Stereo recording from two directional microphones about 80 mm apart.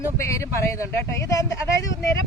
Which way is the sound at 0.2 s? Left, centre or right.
Left.